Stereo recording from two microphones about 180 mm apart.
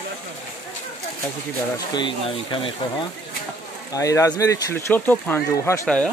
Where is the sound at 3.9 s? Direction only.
20° left (ahead or behind).